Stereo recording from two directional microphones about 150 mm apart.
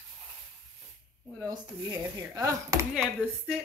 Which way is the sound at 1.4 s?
25° right (ahead or behind).